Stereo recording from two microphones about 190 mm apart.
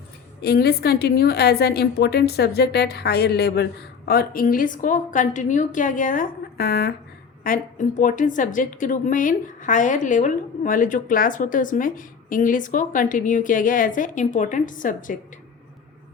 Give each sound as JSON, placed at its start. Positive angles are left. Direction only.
{"t": 0.4, "sound": "a woman's voice", "side_deg": 55}